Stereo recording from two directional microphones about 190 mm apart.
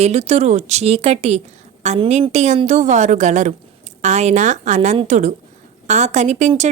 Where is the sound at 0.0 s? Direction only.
35° right (ahead or behind).